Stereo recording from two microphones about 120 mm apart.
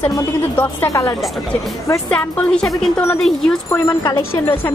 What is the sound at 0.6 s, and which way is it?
Speech, 20° left (ahead or behind).